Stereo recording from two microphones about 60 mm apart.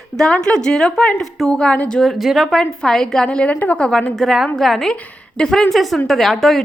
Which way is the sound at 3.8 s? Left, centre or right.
Centre.